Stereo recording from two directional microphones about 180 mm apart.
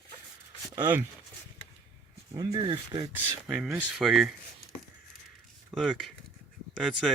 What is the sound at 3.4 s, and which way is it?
Speech, centre (ahead or behind).